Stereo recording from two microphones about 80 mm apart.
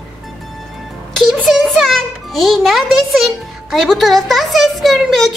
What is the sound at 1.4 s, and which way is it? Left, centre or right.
A child's voice, centre.